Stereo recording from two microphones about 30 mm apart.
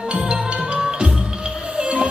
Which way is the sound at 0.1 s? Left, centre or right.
Right.